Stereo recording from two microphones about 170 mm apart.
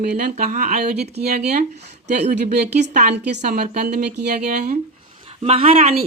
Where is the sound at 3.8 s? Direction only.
65° right (ahead or behind).